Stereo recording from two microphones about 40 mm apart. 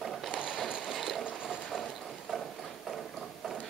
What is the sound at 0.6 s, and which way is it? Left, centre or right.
Water, centre.